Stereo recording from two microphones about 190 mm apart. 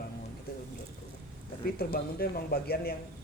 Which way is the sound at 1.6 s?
55° left (ahead or behind).